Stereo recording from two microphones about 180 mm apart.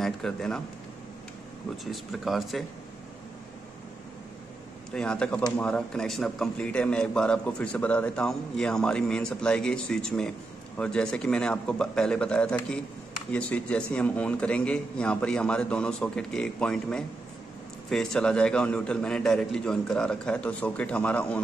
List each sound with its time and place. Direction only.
0.0 s a man's voice: 5° left (ahead or behind)
1.9 s a man's voice: centre (ahead or behind)
4.9 s a man's voice: 5° left (ahead or behind)